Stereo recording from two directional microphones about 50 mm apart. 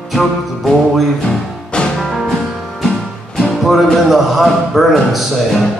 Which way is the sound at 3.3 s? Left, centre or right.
Centre.